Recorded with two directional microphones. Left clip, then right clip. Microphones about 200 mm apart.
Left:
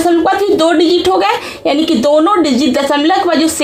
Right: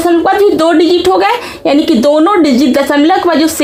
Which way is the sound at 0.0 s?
25° right (ahead or behind).